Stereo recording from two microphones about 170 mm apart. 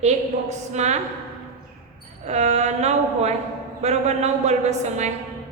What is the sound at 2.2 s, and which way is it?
A woman's voice, 40° right (ahead or behind).